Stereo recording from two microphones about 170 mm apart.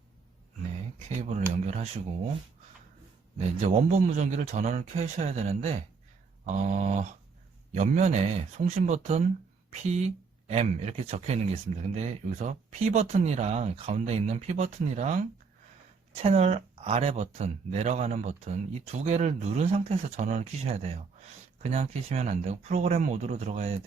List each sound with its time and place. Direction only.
1.2 s speech: 40° right (ahead or behind)
3.3 s speech: 40° right (ahead or behind)